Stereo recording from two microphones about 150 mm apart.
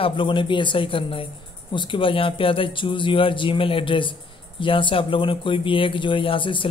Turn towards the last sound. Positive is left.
turn(degrees=35)  # may be behind; listen again after turning